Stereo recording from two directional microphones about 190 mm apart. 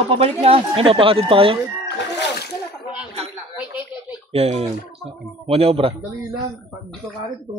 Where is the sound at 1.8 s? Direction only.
60° left (ahead or behind).